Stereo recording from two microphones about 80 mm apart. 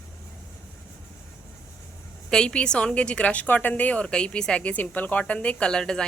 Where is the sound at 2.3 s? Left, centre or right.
Centre.